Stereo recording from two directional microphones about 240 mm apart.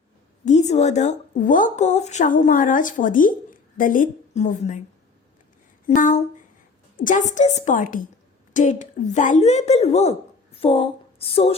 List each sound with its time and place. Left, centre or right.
0.4 s a woman's voice: left
5.9 s a woman's voice: left
10.6 s a sound: left